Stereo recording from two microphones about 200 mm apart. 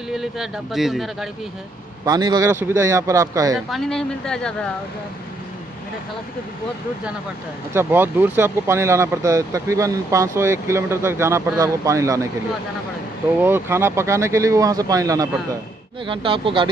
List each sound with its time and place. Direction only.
0.1 s speech: centre (ahead or behind)
2.0 s speech: 20° right (ahead or behind)
3.5 s speech: centre (ahead or behind)
7.7 s speech: 10° right (ahead or behind)
13.4 s speech: 10° right (ahead or behind)